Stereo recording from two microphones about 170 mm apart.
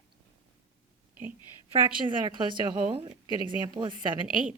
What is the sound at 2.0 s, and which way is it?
A woman's voice, 30° right (ahead or behind).